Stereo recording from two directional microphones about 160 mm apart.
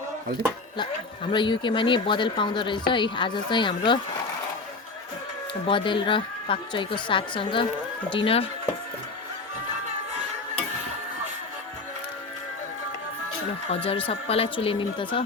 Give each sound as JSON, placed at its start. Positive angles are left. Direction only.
{"t": 1.3, "sound": "speech", "side_deg": 30}
{"t": 5.6, "sound": "a woman's voice", "side_deg": 30}
{"t": 13.7, "sound": "a woman's voice", "side_deg": 35}